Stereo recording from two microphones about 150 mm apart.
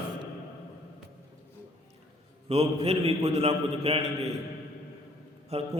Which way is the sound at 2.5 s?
40° right (ahead or behind).